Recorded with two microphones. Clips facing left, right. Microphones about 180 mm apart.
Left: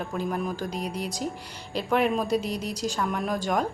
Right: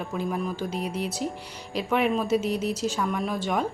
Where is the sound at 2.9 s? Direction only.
Centre (ahead or behind).